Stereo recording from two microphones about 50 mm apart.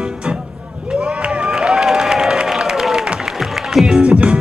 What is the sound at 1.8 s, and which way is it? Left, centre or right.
Crowd, centre.